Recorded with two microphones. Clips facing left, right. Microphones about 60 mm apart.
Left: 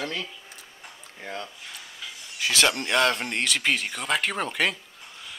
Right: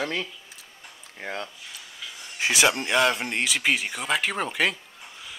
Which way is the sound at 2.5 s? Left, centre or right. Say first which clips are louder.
Right 1 dB; centre.